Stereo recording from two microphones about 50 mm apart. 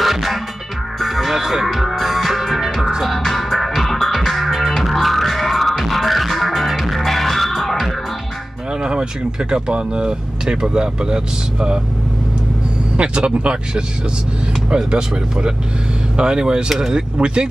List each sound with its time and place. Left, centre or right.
0.0 s music: centre
8.8 s speech: centre
12.9 s speech: right